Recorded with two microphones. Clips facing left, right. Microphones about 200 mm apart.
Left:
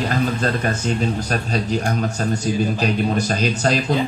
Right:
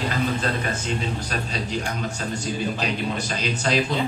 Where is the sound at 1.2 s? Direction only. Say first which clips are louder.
Left 6 dB; 45° left (ahead or behind).